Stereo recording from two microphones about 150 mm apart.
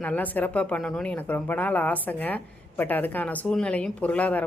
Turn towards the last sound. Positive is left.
turn(degrees=10)  # may be behind; listen again after turning